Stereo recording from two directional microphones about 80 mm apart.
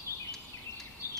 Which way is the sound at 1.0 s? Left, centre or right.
Left.